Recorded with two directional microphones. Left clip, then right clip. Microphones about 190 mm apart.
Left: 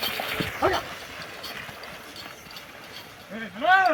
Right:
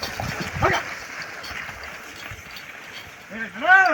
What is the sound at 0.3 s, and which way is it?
Dog, centre (ahead or behind).